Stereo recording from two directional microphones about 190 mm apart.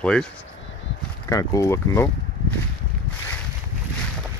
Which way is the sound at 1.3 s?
15° left (ahead or behind).